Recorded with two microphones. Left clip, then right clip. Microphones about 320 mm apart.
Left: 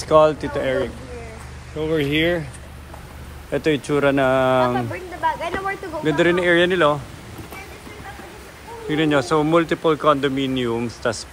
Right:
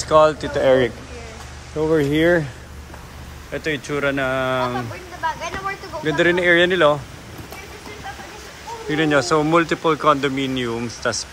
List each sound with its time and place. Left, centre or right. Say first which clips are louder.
0.1 s speech: even; centre
1.8 s speech: right 3 dB; right
3.5 s speech: left 4 dB; centre
4.7 s a sound: left 3 dB; left
6.0 s speech: right 1 dB; centre
8.8 s speech: right 1 dB; centre